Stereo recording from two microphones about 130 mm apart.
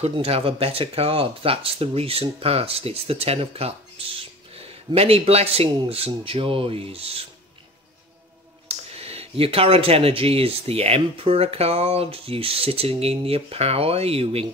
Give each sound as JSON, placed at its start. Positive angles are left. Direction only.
{"t": 0.0, "sound": "speech", "side_deg": -50}
{"t": 8.6, "sound": "speech", "side_deg": -50}